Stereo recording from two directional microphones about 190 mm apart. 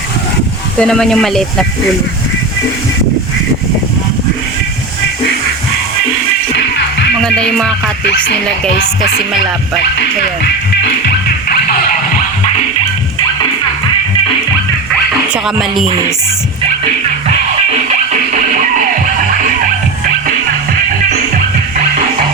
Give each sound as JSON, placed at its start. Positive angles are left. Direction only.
{"t": 0.8, "sound": "speech", "side_deg": 5}
{"t": 7.2, "sound": "speech", "side_deg": 5}
{"t": 11.0, "sound": "music", "side_deg": 50}
{"t": 15.3, "sound": "speech", "side_deg": -5}